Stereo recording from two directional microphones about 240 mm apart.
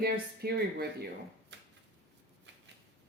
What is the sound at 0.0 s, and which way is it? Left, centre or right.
Speech, right.